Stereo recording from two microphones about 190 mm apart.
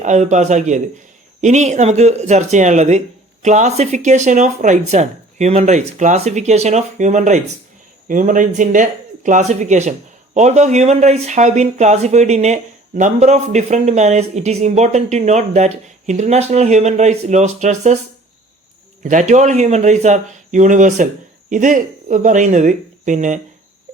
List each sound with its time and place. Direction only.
0.0 s speech: 40° right (ahead or behind)
19.0 s speech: 40° right (ahead or behind)